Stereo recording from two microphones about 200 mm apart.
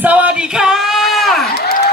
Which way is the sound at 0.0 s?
5° right (ahead or behind).